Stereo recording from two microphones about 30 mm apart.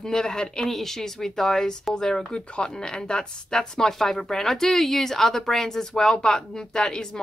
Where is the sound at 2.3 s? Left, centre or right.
Left.